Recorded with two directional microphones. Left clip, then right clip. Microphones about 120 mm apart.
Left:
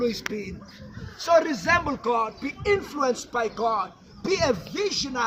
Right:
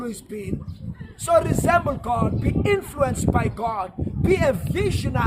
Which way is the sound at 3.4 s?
50° right (ahead or behind).